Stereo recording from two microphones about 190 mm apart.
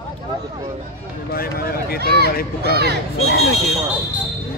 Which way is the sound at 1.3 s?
50° left (ahead or behind).